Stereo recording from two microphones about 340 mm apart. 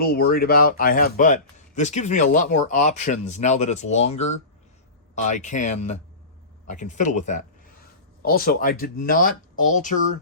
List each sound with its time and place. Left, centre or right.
0.0 s a man's voice: left